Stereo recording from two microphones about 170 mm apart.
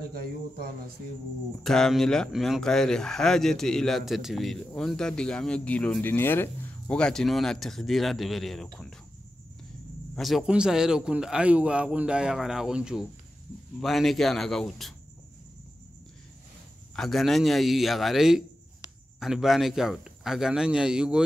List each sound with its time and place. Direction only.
0.1 s speech: 65° right (ahead or behind)
1.6 s speech: centre (ahead or behind)
10.1 s speech: centre (ahead or behind)
16.9 s speech: centre (ahead or behind)